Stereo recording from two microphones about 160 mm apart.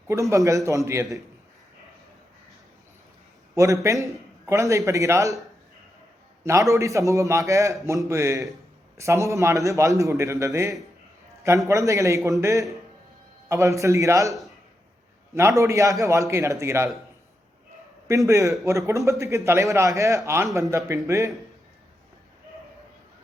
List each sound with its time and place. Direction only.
0.1 s a man's voice: 20° right (ahead or behind)
3.5 s a man's voice: 20° right (ahead or behind)
6.4 s a man's voice: 20° right (ahead or behind)
15.4 s a man's voice: 15° right (ahead or behind)
18.1 s a man's voice: 20° right (ahead or behind)